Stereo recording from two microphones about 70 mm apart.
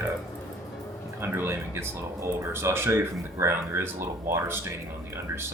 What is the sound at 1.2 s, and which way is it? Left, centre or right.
Speech, right.